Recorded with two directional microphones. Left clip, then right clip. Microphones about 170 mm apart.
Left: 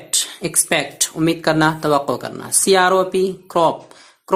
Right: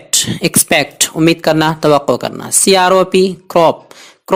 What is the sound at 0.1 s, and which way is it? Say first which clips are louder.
Speech: right 8 dB; 40° right (ahead or behind).